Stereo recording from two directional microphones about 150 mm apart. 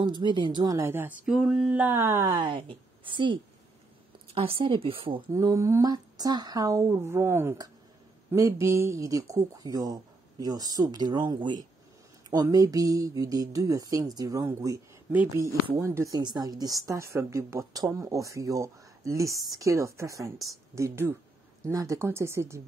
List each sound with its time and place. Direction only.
0.0 s speech: 30° right (ahead or behind)
0.7 s speech: 15° right (ahead or behind)
1.2 s speech: 5° right (ahead or behind); by 2.5 s 20° right (ahead or behind)
2.5 s a woman's voice: 35° right (ahead or behind)
5.3 s a woman's voice: 20° right (ahead or behind)
15.8 s a woman's voice: 20° right (ahead or behind)